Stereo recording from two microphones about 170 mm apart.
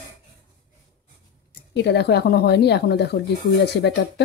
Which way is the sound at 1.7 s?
85° left.